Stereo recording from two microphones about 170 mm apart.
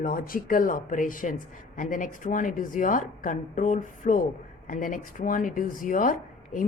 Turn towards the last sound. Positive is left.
turn(degrees=50)  # may be behind; listen again after turning